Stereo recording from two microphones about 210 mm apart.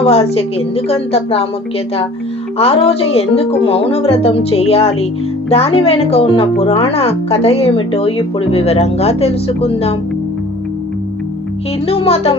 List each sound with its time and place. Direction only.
0.1 s speech: 30° left (ahead or behind)
2.6 s speech: 30° left (ahead or behind)
11.9 s speech: 30° left (ahead or behind)